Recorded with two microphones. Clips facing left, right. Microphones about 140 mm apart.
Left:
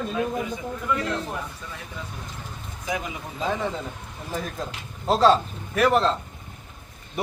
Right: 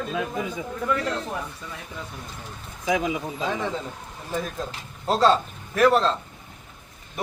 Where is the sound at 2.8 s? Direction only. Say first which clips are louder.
Right 6 dB; 90° right.